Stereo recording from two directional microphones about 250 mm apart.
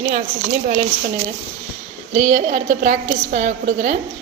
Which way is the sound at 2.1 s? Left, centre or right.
Right.